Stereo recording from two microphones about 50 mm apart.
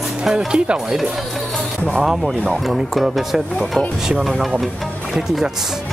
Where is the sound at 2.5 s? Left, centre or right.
Centre.